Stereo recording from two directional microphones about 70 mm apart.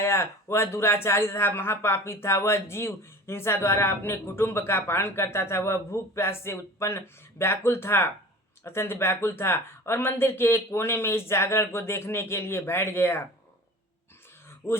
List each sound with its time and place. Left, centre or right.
0.0 s a man's voice: left
14.6 s speech: left